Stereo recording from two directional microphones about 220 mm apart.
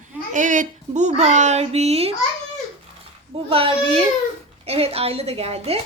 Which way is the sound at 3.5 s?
25° right (ahead or behind).